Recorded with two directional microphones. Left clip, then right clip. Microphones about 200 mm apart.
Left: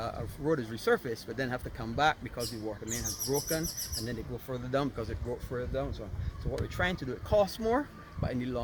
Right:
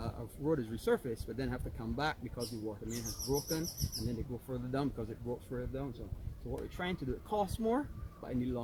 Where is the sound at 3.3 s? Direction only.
15° right (ahead or behind).